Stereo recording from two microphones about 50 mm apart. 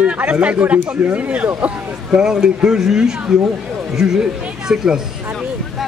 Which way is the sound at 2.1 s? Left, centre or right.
Centre.